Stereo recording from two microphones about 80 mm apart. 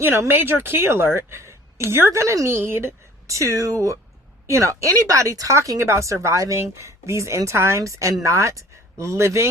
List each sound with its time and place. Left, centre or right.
0.0 s a woman's voice: right